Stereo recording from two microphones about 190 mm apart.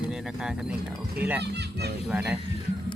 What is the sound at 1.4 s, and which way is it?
Speech, 60° right (ahead or behind).